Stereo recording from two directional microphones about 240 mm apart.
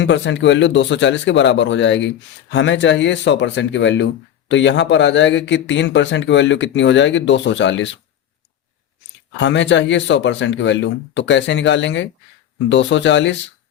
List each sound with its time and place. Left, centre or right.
0.0 s speech: left
9.3 s speech: left